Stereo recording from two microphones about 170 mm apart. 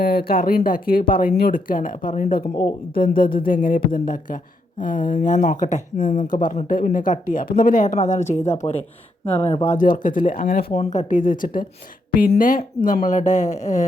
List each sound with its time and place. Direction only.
0.0 s speech: 65° left (ahead or behind); by 9.7 s 35° left (ahead or behind)
9.7 s speech: 55° left (ahead or behind)
10.7 s speech: 40° left (ahead or behind)